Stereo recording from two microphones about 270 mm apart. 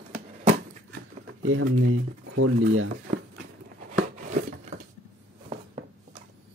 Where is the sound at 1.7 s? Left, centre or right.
Right.